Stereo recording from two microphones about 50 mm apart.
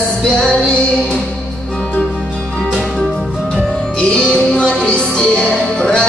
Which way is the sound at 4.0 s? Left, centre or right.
Left.